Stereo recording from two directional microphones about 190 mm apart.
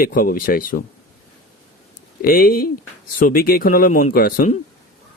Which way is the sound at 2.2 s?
50° left (ahead or behind).